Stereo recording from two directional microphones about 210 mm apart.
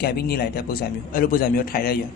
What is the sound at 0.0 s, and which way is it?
A man's voice, 45° left (ahead or behind).